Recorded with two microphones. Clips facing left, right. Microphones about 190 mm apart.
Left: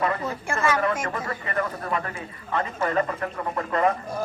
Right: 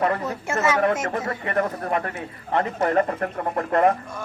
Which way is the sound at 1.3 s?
50° right (ahead or behind).